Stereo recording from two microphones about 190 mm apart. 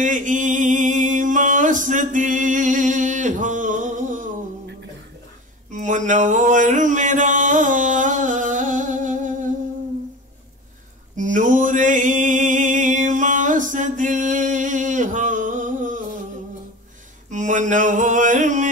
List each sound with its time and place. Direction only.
0.0 s mantra: 40° right (ahead or behind)
5.7 s music: 40° right (ahead or behind)
11.1 s a sound: 40° right (ahead or behind)
17.3 s mantra: 40° right (ahead or behind)